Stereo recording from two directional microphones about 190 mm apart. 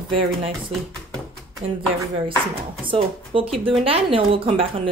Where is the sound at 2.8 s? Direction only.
30° right (ahead or behind).